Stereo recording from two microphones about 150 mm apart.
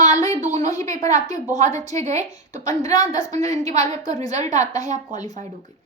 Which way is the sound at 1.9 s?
50° right (ahead or behind).